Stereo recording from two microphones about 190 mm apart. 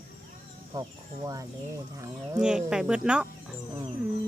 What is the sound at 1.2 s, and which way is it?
Speech, 20° right (ahead or behind).